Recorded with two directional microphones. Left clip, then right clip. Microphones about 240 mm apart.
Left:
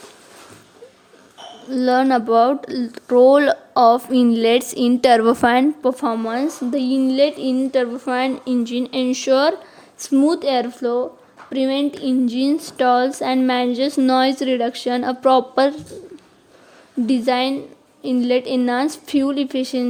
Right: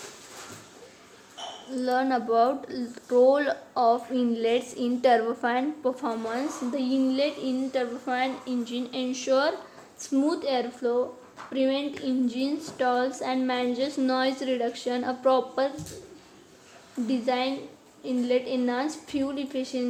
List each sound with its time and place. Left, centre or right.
1.7 s speech: left
17.1 s speech: left